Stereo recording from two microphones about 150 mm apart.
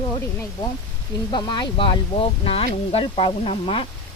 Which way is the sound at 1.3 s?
30° left (ahead or behind).